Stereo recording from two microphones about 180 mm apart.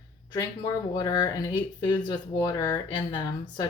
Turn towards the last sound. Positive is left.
turn(degrees=25)  # may be behind; listen again after turning